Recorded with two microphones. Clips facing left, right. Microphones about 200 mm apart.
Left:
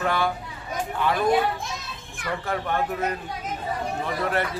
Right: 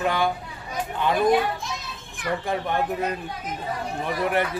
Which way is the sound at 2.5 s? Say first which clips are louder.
Even; 15° right (ahead or behind).